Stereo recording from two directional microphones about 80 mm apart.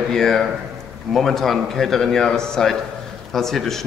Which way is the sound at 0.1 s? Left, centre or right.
Centre.